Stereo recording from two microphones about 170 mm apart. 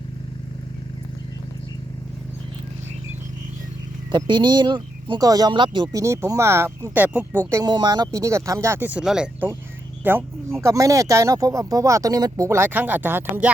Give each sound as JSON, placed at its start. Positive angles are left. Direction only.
{"t": 4.1, "sound": "speech", "side_deg": -25}